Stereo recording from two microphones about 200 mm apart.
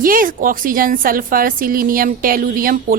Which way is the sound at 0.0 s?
45° right (ahead or behind).